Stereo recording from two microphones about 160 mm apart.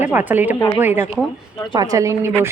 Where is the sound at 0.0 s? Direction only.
10° right (ahead or behind).